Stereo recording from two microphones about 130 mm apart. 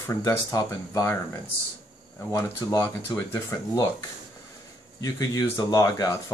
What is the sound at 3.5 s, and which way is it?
Speech, 20° left (ahead or behind).